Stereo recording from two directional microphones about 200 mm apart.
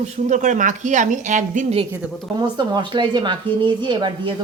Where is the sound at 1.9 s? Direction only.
20° right (ahead or behind).